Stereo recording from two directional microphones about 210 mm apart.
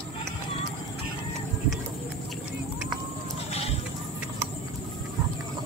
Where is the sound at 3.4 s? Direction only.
30° left (ahead or behind).